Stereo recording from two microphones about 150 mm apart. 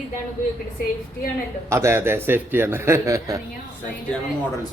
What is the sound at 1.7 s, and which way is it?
A man's voice, 20° right (ahead or behind).